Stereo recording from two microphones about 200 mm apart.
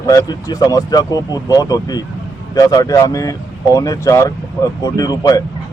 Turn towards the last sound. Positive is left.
turn(degrees=20)  # may be behind; listen again after turning